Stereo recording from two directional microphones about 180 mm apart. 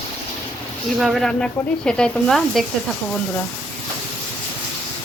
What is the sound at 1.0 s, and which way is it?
Speech, centre (ahead or behind).